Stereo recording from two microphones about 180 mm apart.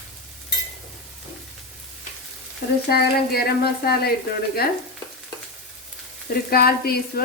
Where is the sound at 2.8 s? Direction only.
60° left (ahead or behind).